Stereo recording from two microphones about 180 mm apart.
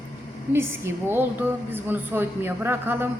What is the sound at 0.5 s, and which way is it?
A woman's voice, 15° right (ahead or behind).